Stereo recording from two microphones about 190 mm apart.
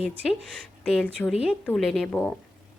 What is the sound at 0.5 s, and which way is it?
Speech, 5° left (ahead or behind).